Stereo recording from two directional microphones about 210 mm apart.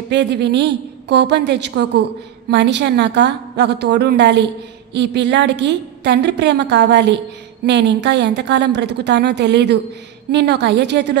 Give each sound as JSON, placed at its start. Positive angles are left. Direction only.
{"t": 0.1, "sound": "a woman's voice", "side_deg": -55}